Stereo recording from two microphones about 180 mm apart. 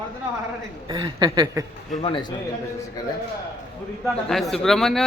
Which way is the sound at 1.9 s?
30° left (ahead or behind).